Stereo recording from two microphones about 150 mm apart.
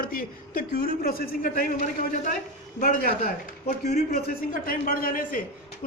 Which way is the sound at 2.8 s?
75° left (ahead or behind).